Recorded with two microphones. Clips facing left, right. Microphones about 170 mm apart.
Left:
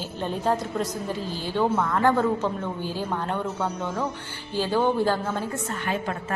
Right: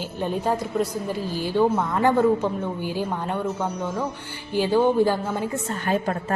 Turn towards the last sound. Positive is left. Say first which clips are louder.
# right 4 dB
turn(degrees=-40)  # may be behind; listen again after turning